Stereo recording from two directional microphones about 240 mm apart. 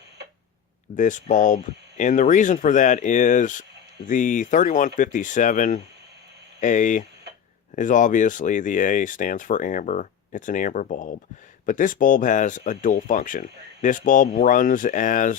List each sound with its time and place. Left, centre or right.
0.9 s speech: left